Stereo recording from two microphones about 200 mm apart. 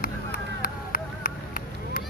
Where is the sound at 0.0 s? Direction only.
45° left (ahead or behind).